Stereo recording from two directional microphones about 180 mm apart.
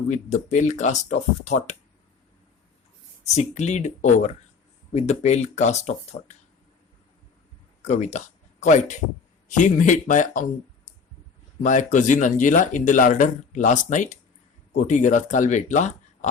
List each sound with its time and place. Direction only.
0.1 s speech: 40° left (ahead or behind)
3.3 s speech: 40° left (ahead or behind)
7.8 s speech: 40° left (ahead or behind)
11.6 s speech: 45° left (ahead or behind)